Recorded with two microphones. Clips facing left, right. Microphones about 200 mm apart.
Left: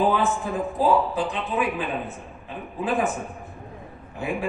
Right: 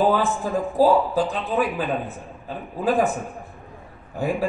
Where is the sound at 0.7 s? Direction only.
35° right (ahead or behind).